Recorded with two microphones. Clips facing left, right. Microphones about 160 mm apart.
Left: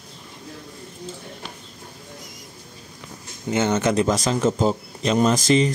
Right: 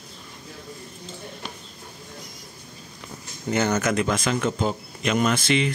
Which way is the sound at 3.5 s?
25° left (ahead or behind).